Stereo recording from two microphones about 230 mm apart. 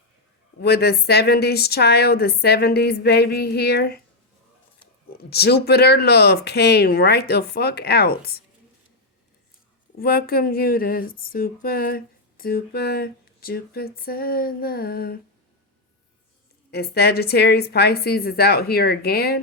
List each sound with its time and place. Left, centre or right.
0.6 s a woman's voice: left
5.1 s a woman's voice: left
10.0 s speech: left
16.7 s a woman's voice: left